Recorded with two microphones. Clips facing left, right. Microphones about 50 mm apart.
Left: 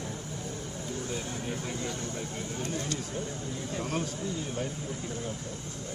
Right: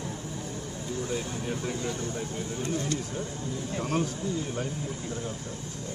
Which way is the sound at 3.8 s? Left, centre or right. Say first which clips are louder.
Right 5 dB; right.